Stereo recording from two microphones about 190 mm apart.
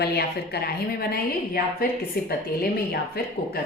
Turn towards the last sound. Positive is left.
turn(degrees=55)  # may be behind; listen again after turning